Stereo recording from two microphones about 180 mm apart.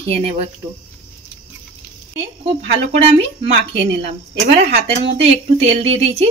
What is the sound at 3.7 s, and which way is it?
Speech, 75° right (ahead or behind).